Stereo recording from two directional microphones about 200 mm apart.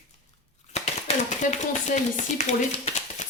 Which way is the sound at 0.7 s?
35° left (ahead or behind).